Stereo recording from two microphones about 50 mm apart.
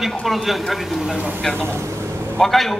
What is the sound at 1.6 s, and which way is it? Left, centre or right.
Speech, right.